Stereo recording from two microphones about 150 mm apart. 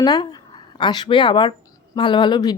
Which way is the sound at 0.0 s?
30° left (ahead or behind).